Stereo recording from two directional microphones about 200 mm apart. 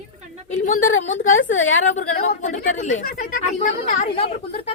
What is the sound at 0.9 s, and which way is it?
Speech, 80° left.